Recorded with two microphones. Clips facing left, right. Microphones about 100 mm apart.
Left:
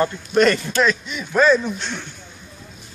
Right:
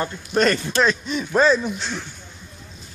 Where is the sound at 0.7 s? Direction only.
35° right (ahead or behind).